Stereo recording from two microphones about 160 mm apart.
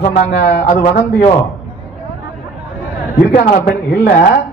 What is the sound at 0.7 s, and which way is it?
Speech, 75° left (ahead or behind).